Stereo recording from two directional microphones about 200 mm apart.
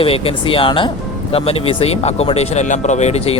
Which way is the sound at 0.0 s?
30° left (ahead or behind).